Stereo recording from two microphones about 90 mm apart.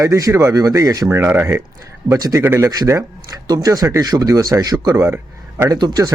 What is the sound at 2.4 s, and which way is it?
Speech, 25° right (ahead or behind).